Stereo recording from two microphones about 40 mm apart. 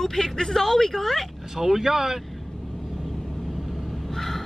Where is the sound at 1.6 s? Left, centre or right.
Centre.